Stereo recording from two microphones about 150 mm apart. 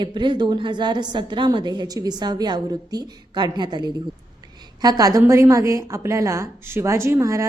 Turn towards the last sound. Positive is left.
turn(degrees=-20)  # may be behind; listen again after turning